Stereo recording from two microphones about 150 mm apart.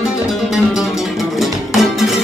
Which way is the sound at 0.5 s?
5° right (ahead or behind).